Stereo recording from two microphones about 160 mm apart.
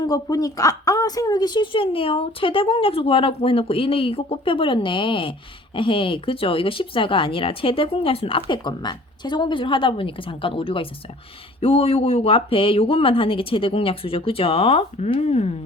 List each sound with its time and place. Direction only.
0.0 s speech: 25° left (ahead or behind); by 15.5 s 40° left (ahead or behind)